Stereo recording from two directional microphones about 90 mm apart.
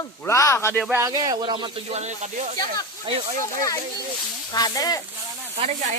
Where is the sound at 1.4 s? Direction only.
60° right (ahead or behind).